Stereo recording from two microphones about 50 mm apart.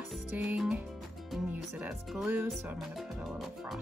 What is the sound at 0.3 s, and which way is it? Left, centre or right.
Music, right.